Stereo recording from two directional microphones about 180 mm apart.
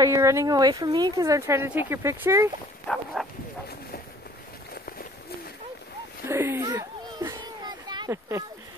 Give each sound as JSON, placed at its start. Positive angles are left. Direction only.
{"t": 0.0, "sound": "speech", "side_deg": -15}
{"t": 2.9, "sound": "dog", "side_deg": 10}
{"t": 6.2, "sound": "children playing", "side_deg": -15}